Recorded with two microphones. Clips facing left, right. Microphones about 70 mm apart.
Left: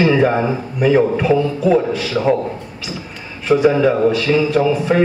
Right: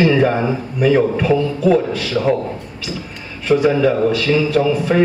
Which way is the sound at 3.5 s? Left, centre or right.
Centre.